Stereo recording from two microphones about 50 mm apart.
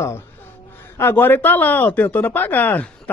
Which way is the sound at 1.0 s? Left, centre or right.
Left.